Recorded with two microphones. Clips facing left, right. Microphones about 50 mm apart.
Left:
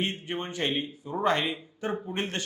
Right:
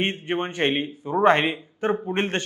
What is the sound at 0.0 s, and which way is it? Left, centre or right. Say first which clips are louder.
A man's voice: right 6 dB; right.